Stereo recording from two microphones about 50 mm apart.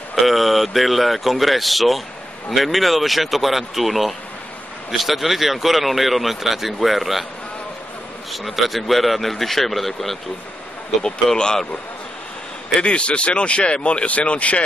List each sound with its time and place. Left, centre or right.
0.1 s speech: centre
8.3 s speech: centre
12.8 s speech: left